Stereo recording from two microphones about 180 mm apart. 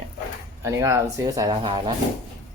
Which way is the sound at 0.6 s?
15° right (ahead or behind).